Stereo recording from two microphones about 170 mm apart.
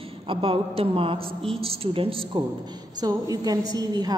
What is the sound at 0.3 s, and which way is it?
A man's voice, 30° right (ahead or behind).